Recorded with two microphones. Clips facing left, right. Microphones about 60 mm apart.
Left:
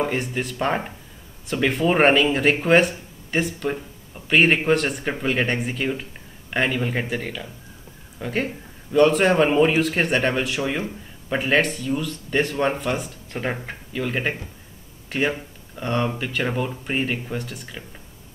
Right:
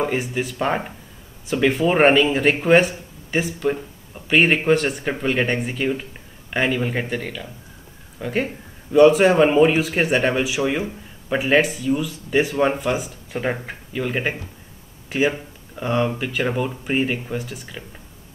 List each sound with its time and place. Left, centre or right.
0.0 s speech: centre